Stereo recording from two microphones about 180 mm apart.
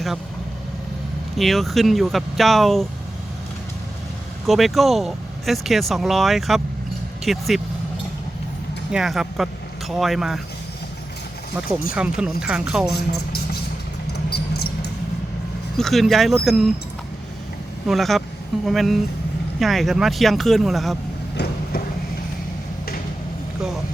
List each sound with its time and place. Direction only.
1.4 s speech: centre (ahead or behind)
4.4 s speech: centre (ahead or behind)
8.9 s speech: 5° right (ahead or behind)
11.9 s speech: 5° right (ahead or behind)
12.9 s speech: 60° left (ahead or behind)
14.1 s a sound: 65° left (ahead or behind)
15.8 s speech: centre (ahead or behind)
17.8 s speech: centre (ahead or behind)
21.3 s a sound: 65° left (ahead or behind)